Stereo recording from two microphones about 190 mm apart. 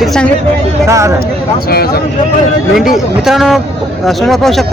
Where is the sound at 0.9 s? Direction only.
15° right (ahead or behind).